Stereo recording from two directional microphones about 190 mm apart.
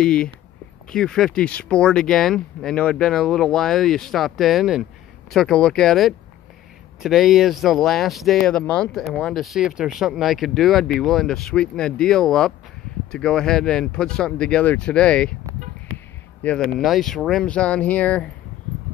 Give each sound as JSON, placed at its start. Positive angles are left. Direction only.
{"t": 0.0, "sound": "speech", "side_deg": 5}
{"t": 15.9, "sound": "a sound", "side_deg": -90}
{"t": 16.4, "sound": "speech", "side_deg": 5}